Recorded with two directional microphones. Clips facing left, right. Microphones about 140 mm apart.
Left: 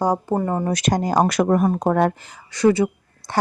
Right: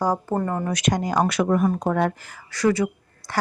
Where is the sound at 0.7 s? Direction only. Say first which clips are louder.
Left 3 dB; 35° left (ahead or behind).